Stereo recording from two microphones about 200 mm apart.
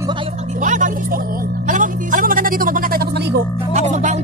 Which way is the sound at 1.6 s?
40° right (ahead or behind).